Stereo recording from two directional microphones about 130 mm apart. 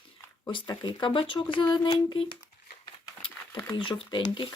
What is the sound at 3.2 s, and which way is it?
Crumpling, 40° left (ahead or behind).